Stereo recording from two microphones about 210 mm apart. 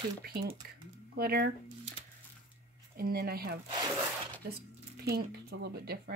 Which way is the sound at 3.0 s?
45° right (ahead or behind).